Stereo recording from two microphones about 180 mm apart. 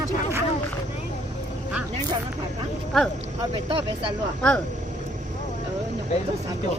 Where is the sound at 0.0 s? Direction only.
15° right (ahead or behind).